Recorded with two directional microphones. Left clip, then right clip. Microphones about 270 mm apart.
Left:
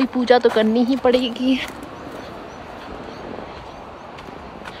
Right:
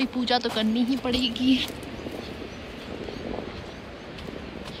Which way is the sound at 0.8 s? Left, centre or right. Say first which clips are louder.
Left 9 dB; centre.